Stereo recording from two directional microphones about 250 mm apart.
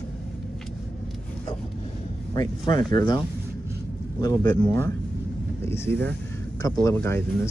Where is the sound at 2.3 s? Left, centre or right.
Centre.